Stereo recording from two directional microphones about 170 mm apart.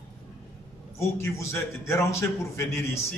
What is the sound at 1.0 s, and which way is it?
A man's voice, 15° left (ahead or behind).